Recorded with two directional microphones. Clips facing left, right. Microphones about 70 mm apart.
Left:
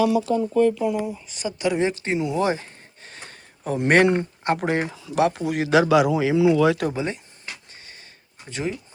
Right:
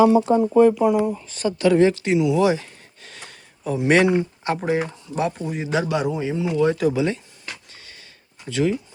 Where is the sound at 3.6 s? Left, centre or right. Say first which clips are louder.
Even; left.